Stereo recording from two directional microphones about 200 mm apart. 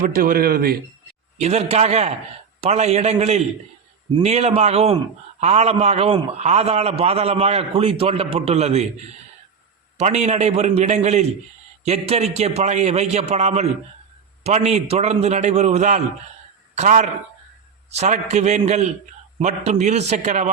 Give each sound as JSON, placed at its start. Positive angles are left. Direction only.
{"t": 0.1, "sound": "speech", "side_deg": -45}
{"t": 1.4, "sound": "a man's voice", "side_deg": -35}
{"t": 10.0, "sound": "a man's voice", "side_deg": -35}